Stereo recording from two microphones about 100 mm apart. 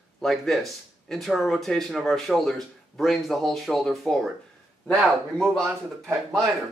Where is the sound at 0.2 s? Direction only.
5° left (ahead or behind).